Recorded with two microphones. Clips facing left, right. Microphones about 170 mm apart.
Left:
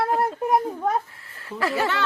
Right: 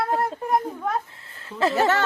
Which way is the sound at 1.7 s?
45° right (ahead or behind).